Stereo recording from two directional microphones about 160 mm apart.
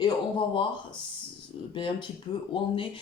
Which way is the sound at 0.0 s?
30° left (ahead or behind).